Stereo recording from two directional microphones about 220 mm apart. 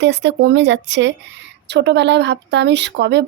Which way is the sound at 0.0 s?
50° right (ahead or behind).